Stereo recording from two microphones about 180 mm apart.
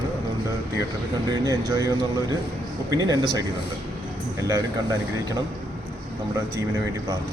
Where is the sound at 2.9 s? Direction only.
20° right (ahead or behind).